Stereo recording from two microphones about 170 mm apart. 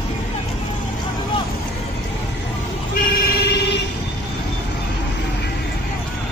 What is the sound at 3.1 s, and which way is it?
Vehicle, 65° left (ahead or behind).